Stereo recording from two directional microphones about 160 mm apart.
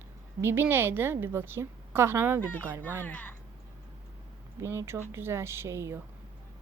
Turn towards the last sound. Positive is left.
turn(degrees=-15)  # may be behind; listen again after turning